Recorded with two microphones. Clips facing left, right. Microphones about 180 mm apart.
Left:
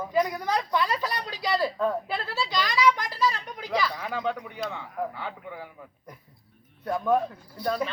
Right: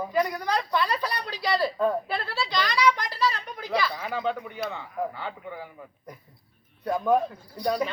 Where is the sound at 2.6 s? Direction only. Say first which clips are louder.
Left 1 dB; 5° left (ahead or behind).